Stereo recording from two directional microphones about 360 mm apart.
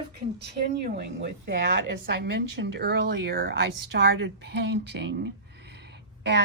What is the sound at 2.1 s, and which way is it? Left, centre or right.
Speech, right.